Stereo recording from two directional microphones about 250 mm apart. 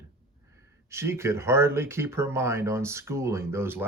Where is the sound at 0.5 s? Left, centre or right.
Centre.